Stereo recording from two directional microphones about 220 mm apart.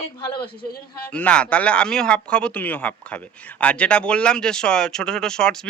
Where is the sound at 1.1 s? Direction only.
5° left (ahead or behind).